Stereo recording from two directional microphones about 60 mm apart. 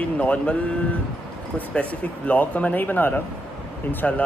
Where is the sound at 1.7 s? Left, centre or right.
Left.